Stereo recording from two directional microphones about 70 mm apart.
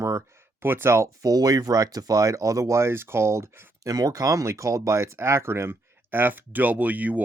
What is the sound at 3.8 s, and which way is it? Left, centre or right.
Speech, right.